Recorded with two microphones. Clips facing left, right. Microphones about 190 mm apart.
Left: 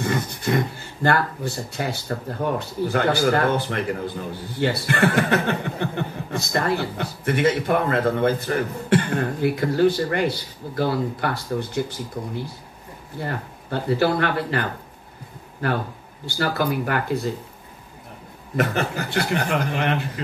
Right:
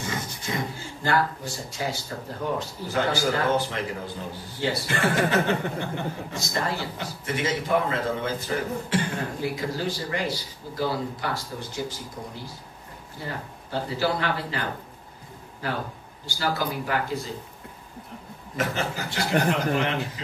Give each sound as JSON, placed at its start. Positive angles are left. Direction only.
{"t": 0.0, "sound": "a man's voice", "side_deg": 60}
{"t": 18.6, "sound": "a man's voice", "side_deg": 60}